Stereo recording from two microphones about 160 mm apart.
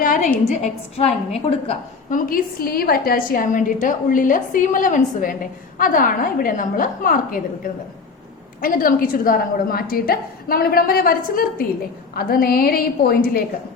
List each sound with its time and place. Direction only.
0.0 s a woman's voice: 60° left (ahead or behind)
0.4 s a woman's voice: 45° left (ahead or behind)
2.0 s a woman's voice: 60° left (ahead or behind)